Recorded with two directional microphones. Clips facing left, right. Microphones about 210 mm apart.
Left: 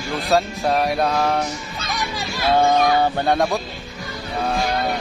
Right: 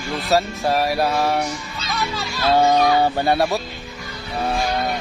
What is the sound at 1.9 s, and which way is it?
Children playing, 15° left (ahead or behind).